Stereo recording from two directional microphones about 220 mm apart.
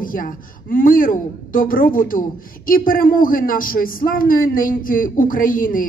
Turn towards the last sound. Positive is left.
turn(degrees=40)  # may be behind; listen again after turning